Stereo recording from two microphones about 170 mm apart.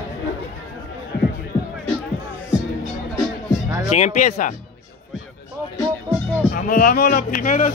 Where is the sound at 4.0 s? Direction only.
45° left (ahead or behind).